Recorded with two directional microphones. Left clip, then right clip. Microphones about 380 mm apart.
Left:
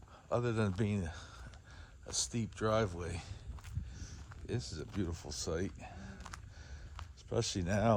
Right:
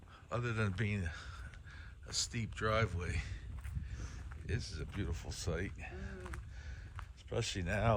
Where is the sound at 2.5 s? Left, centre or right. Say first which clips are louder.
Left 2 dB; centre.